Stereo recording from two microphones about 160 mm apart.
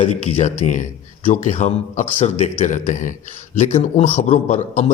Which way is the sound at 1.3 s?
50° left (ahead or behind).